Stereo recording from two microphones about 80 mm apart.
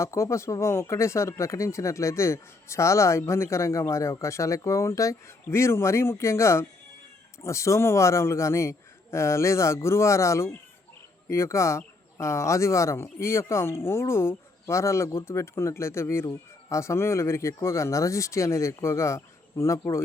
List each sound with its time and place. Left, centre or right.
0.0 s speech: left